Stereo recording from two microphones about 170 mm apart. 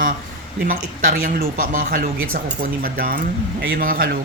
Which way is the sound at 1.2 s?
50° right (ahead or behind).